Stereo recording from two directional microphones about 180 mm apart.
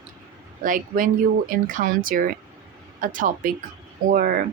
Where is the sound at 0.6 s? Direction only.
50° right (ahead or behind).